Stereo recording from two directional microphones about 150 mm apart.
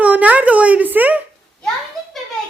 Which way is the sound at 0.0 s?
10° right (ahead or behind).